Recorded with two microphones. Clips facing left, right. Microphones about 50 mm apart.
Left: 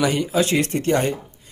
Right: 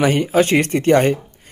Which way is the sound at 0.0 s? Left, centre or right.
Right.